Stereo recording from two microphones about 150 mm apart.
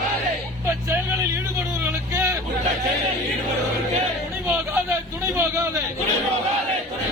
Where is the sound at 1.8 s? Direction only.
15° right (ahead or behind).